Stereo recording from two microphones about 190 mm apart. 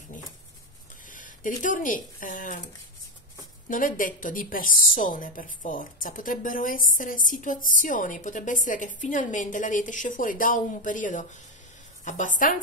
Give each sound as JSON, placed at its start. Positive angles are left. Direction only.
{"t": 1.1, "sound": "speech", "side_deg": 45}
{"t": 3.6, "sound": "a woman's voice", "side_deg": 45}